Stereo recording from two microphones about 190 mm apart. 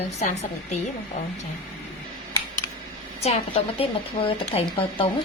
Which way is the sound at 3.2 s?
35° left (ahead or behind).